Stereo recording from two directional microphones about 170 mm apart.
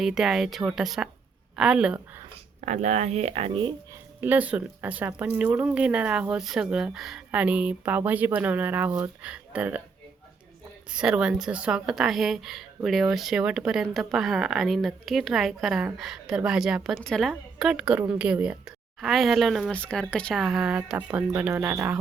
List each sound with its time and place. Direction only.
0.0 s a woman's voice: centre (ahead or behind)
2.6 s speech: 45° right (ahead or behind)
4.2 s speech: 10° right (ahead or behind)
10.9 s a woman's voice: 5° right (ahead or behind)